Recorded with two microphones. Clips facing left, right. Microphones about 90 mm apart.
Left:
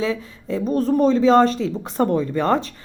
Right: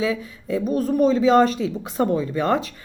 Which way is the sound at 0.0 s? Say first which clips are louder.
Even; 35° left (ahead or behind).